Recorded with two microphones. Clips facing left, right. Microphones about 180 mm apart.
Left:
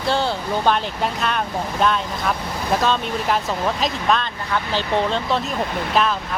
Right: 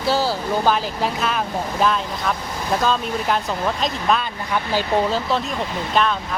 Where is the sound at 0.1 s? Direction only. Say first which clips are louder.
Right 1 dB; 5° right (ahead or behind).